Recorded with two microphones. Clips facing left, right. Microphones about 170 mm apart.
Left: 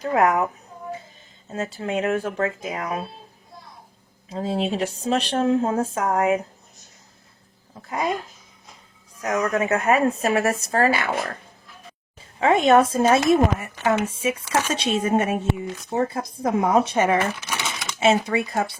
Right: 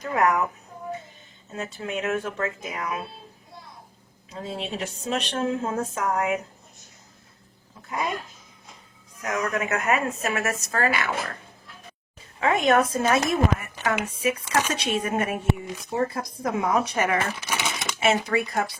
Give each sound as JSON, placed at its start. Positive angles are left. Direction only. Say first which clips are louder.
{"t": 0.0, "sound": "speech", "louder": "left 3 dB", "side_deg": 30}
{"t": 1.5, "sound": "a woman's voice", "louder": "left 5 dB", "side_deg": 30}
{"t": 4.3, "sound": "a woman's voice", "louder": "left 8 dB", "side_deg": 30}
{"t": 7.9, "sound": "speech", "louder": "left 4 dB", "side_deg": 30}
{"t": 9.2, "sound": "a woman's voice", "louder": "left 5 dB", "side_deg": 35}
{"t": 12.4, "sound": "speech", "louder": "left 4 dB", "side_deg": 25}